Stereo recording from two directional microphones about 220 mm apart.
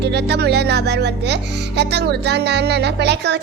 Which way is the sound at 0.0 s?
50° right (ahead or behind).